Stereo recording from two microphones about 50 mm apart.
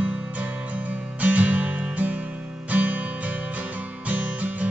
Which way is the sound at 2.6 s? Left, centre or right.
Right.